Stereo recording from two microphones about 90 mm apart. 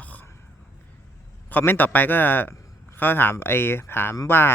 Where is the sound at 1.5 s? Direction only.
20° left (ahead or behind).